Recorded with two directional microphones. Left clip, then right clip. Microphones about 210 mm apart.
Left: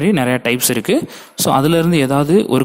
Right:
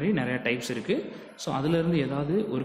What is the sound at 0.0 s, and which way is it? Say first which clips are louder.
Speech: left 12 dB; 45° left (ahead or behind).